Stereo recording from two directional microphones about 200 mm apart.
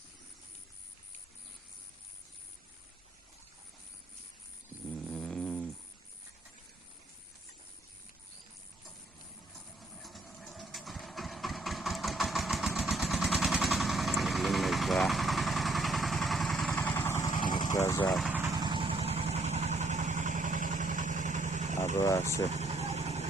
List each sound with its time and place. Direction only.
4.9 s a sound: centre (ahead or behind)
10.0 s engine: centre (ahead or behind)
16.7 s vehicle: 10° left (ahead or behind)
18.1 s vehicle: 5° right (ahead or behind)
18.5 s vehicle: 25° right (ahead or behind)
21.9 s vehicle: 15° left (ahead or behind)
22.4 s vehicle: 35° right (ahead or behind)